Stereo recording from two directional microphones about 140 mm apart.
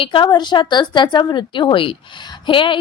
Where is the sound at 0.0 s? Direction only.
35° left (ahead or behind).